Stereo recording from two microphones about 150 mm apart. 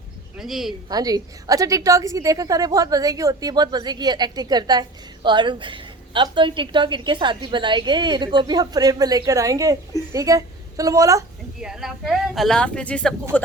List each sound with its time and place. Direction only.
0.3 s speech: centre (ahead or behind)
0.9 s a woman's voice: 25° right (ahead or behind)
11.6 s speech: 5° right (ahead or behind)